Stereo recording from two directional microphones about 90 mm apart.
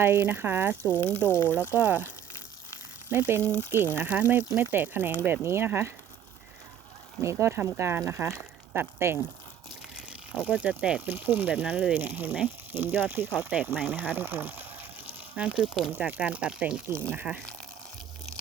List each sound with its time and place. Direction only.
0.0 s speech: 20° right (ahead or behind)
0.8 s speech: 25° left (ahead or behind)
1.7 s speech: 20° right (ahead or behind)
3.1 s speech: 25° right (ahead or behind)
3.4 s speech: 20° left (ahead or behind)
3.9 s speech: 20° right (ahead or behind)
7.2 s speech: 30° right (ahead or behind)
9.9 s speech: 10° right (ahead or behind)
15.4 s speech: 10° right (ahead or behind)
16.0 s speech: 15° right (ahead or behind)
16.9 s speech: 15° left (ahead or behind)